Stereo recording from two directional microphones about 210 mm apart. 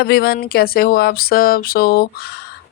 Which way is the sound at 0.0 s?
50° left (ahead or behind).